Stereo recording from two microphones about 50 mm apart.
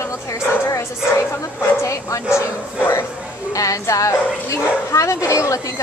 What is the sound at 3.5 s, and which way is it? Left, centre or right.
Speech, left.